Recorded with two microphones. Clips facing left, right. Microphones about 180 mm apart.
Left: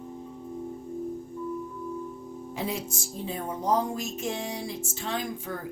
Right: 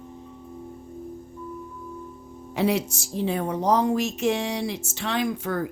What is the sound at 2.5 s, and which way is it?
Speech, 75° right (ahead or behind).